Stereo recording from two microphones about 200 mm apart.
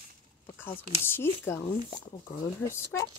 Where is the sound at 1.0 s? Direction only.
10° left (ahead or behind).